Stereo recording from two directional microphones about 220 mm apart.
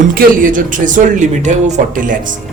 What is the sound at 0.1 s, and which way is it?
Speech, 40° right (ahead or behind).